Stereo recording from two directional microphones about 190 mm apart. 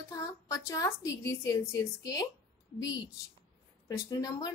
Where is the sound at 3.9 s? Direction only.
20° left (ahead or behind).